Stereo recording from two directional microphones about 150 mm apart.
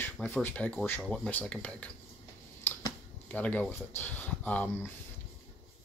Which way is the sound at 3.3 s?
10° left (ahead or behind).